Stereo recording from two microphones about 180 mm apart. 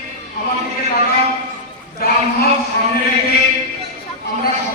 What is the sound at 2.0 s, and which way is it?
Speech, 55° left (ahead or behind).